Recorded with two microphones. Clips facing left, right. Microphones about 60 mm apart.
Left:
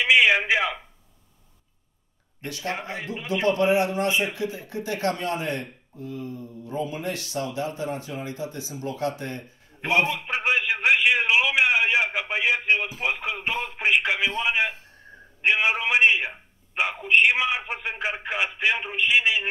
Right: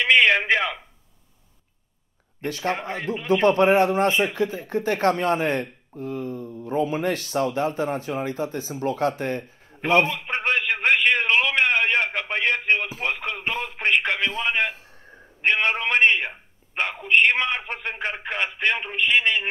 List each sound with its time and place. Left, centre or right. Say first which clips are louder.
0.0 s a man's voice: right 1 dB; centre
2.4 s speech: right 5 dB; right
9.8 s speech: right 3 dB; centre
10.3 s a sound: right 1 dB; centre
13.0 s radio: even; centre
14.4 s a man's voice: even; centre